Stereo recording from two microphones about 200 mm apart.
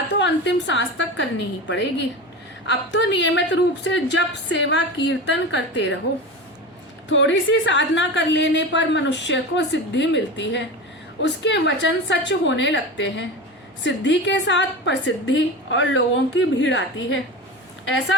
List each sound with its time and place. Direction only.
0.2 s a woman's voice: 65° left (ahead or behind)
7.1 s a woman's voice: 65° left (ahead or behind)